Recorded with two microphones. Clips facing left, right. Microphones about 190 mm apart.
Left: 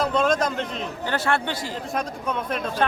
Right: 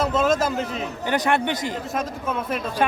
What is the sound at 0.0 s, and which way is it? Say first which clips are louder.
Speech: right 1 dB; 5° right (ahead or behind).